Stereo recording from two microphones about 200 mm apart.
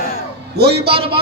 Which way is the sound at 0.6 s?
55° right (ahead or behind).